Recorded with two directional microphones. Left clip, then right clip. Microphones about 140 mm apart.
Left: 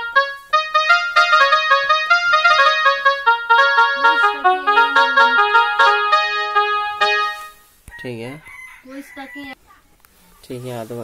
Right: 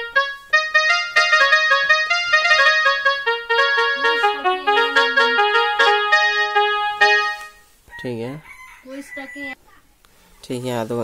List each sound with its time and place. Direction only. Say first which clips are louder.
0.0 s music: left 3 dB; 40° right (ahead or behind)
8.0 s chicken: right 2 dB; 30° right (ahead or behind)
10.4 s speech: right 4 dB; 50° right (ahead or behind)